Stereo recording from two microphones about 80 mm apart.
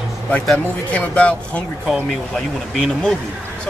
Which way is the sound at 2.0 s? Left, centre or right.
Centre.